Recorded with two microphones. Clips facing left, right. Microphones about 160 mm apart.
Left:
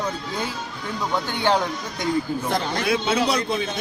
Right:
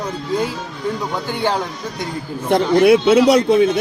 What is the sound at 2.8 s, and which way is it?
Speech, 70° right (ahead or behind).